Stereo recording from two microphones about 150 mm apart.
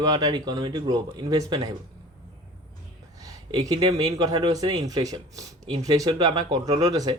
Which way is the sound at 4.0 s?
25° right (ahead or behind).